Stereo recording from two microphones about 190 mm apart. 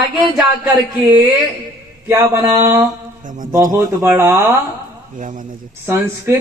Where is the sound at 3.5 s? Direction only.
20° right (ahead or behind).